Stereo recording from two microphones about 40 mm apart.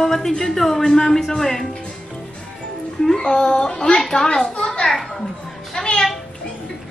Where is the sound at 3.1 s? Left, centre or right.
Centre.